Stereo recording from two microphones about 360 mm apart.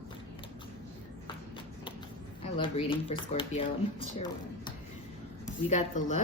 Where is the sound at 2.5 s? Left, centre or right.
Centre.